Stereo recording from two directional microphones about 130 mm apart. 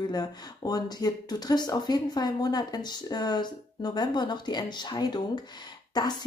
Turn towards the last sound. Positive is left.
turn(degrees=30)  # may be behind; listen again after turning